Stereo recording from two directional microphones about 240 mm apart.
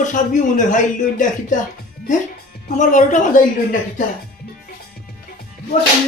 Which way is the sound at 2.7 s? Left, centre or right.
Left.